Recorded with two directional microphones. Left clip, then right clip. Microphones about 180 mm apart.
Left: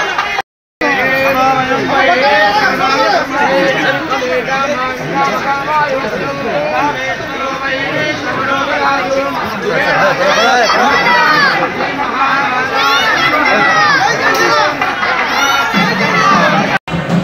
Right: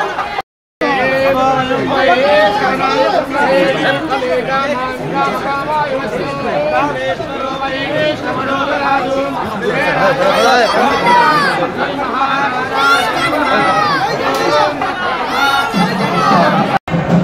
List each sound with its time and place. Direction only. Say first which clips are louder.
11.1 s children playing: left 1 dB; 70° right (ahead or behind)
13.8 s crowd: left 4 dB; 75° right (ahead or behind)